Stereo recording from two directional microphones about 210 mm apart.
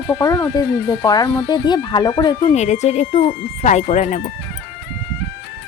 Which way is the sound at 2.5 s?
35° left (ahead or behind).